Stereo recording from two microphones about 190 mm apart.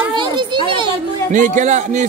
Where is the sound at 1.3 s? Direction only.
40° right (ahead or behind).